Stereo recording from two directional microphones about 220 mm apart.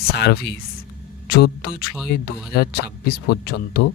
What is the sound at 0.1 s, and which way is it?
Speech, 45° left (ahead or behind).